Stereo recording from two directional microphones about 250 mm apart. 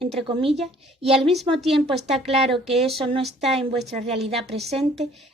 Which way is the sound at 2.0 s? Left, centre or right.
Right.